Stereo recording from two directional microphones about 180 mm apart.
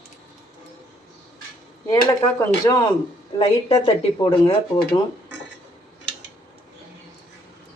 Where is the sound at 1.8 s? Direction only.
20° left (ahead or behind).